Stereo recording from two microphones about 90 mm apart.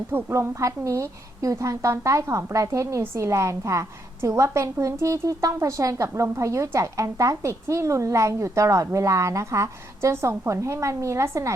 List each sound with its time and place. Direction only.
0.1 s a woman's voice: 25° right (ahead or behind)